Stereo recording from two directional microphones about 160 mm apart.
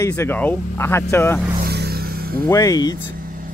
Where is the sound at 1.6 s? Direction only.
85° right.